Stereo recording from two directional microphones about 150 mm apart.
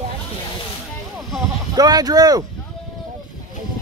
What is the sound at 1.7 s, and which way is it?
Speech, 25° right (ahead or behind).